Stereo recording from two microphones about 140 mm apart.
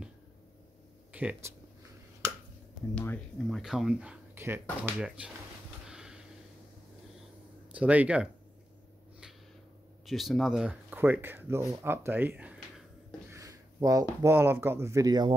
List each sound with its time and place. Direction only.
1.1 s speech: 10° right (ahead or behind)
2.9 s speech: 10° left (ahead or behind); by 4.2 s 5° right (ahead or behind)
4.4 s speech: 15° right (ahead or behind)
5.9 s snort: 5° right (ahead or behind)
7.7 s speech: 10° right (ahead or behind)
10.0 s speech: centre (ahead or behind)
13.3 s speech: 25° right (ahead or behind)